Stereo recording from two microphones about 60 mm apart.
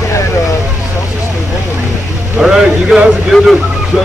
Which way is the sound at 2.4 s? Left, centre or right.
Centre.